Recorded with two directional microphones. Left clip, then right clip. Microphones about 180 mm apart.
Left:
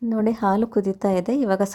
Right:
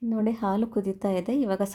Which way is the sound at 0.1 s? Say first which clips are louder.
Left 6 dB; 20° left (ahead or behind).